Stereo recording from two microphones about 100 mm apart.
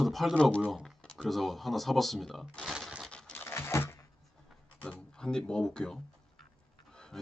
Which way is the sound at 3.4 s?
25° left (ahead or behind).